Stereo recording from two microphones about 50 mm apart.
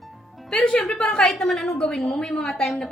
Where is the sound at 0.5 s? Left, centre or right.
Centre.